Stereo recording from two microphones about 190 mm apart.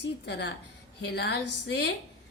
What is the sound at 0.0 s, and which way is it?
A woman's voice, 65° left (ahead or behind).